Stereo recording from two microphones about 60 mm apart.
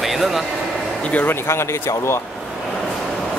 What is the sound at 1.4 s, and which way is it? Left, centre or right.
Speech, left.